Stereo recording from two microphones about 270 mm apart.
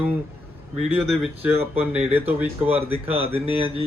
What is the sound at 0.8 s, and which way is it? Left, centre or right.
Speech, centre.